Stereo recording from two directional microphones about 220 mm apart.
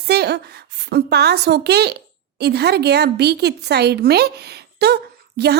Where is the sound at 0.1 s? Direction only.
50° right (ahead or behind).